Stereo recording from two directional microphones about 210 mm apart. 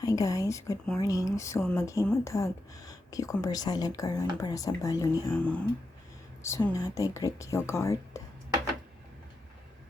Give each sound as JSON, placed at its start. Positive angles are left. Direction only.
{"t": 0.0, "sound": "speech", "side_deg": 15}
{"t": 5.4, "sound": "speech", "side_deg": 5}